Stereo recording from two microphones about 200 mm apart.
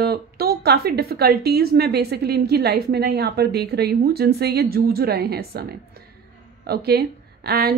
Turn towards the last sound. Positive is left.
turn(degrees=-50)  # may be behind; listen again after turning